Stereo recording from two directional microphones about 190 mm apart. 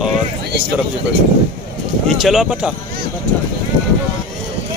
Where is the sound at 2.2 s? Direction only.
Centre (ahead or behind).